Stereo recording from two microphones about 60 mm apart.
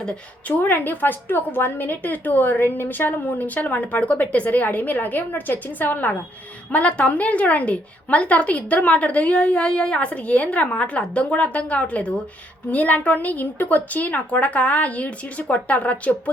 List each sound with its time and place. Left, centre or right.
0.4 s a woman's voice: left